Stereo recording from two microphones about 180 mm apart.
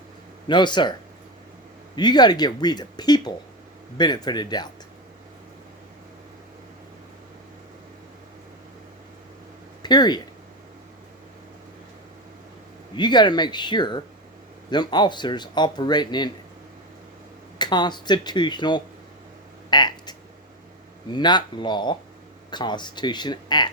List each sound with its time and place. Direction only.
0.4 s speech: 25° left (ahead or behind)
2.0 s speech: 25° left (ahead or behind)
9.8 s speech: 25° left (ahead or behind)
13.0 s speech: 25° left (ahead or behind)
17.6 s speech: 25° left (ahead or behind)